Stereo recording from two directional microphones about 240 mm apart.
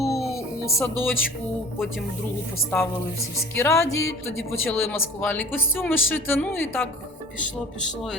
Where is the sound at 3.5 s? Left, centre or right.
Centre.